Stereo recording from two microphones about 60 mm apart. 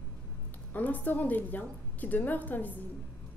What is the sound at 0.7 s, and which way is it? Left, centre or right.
A woman's voice, left.